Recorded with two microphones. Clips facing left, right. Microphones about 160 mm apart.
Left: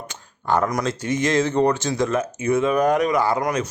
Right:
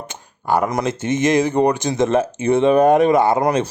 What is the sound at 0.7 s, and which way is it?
Speech, 20° right (ahead or behind).